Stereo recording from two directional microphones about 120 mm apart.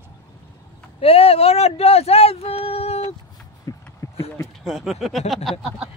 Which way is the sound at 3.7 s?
25° left (ahead or behind).